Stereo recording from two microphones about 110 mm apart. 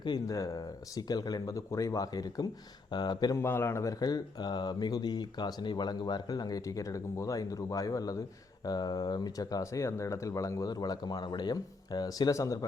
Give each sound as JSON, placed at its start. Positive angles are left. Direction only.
{"t": 0.0, "sound": "speech", "side_deg": 35}
{"t": 3.3, "sound": "speech", "side_deg": 20}